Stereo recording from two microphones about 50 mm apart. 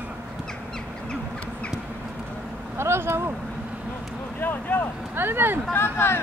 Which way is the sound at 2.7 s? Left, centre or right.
Right.